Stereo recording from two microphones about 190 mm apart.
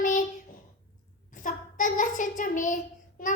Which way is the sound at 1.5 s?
45° left (ahead or behind).